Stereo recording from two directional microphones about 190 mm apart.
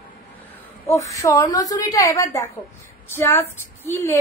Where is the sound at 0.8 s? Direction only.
15° left (ahead or behind).